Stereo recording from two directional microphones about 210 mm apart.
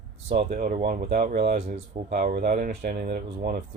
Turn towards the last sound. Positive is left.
turn(degrees=-45)  # may be behind; listen again after turning